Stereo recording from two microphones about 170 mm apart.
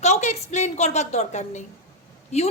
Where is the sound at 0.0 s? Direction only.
40° left (ahead or behind).